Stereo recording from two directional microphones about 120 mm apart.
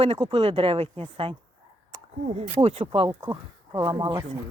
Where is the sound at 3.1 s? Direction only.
25° right (ahead or behind).